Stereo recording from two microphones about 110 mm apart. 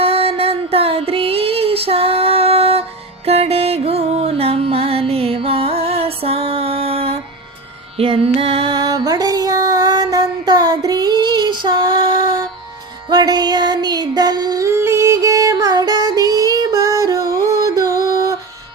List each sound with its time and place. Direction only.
0.0 s child singing: 60° right (ahead or behind)
3.2 s music: 70° right (ahead or behind)
8.7 s music: 35° right (ahead or behind)
13.1 s music: 40° right (ahead or behind)
14.7 s music: 25° right (ahead or behind)